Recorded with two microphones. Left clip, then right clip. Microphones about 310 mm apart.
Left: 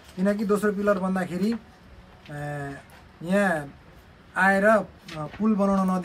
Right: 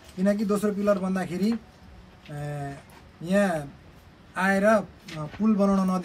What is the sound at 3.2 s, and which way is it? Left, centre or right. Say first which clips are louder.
Speech: left 1 dB; centre.